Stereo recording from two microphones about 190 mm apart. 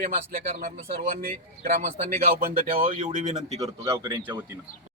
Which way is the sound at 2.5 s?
45° right (ahead or behind).